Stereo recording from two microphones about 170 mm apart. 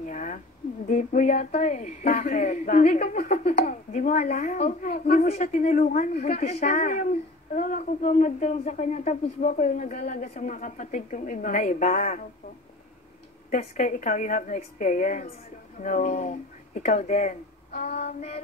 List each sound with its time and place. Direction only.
0.0 s a sound: 50° left (ahead or behind)
0.8 s speech: 45° left (ahead or behind)
13.5 s speech: 50° left (ahead or behind)